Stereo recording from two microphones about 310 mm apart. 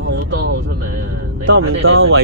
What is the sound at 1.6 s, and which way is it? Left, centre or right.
Speech, right.